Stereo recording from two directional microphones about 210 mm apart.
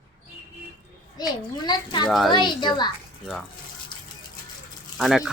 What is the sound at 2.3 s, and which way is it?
Speech, 20° left (ahead or behind).